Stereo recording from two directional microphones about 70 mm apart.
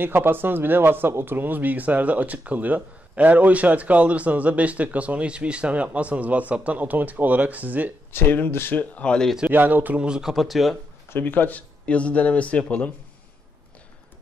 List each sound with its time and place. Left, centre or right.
0.0 s speech: right
8.1 s speech: left
8.7 s a man's voice: centre
9.5 s speech: right
10.0 s speech: centre
11.1 s a man's voice: left